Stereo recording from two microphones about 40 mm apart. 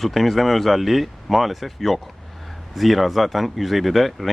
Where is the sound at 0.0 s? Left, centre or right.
Centre.